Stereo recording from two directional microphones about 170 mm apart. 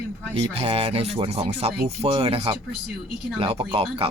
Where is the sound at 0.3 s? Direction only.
35° right (ahead or behind).